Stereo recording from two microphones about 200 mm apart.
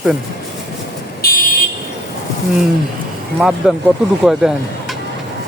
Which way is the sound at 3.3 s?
5° right (ahead or behind).